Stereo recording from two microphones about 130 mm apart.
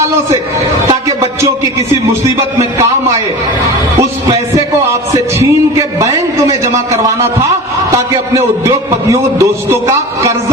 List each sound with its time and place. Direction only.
0.9 s music: 25° right (ahead or behind)
4.3 s a sound: 25° right (ahead or behind)
7.4 s a man's voice: 20° right (ahead or behind)